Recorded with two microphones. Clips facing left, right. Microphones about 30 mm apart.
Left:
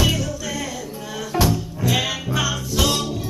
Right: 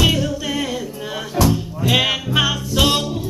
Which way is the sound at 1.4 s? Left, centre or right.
Left.